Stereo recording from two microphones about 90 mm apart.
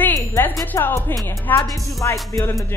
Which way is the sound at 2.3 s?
35° left (ahead or behind).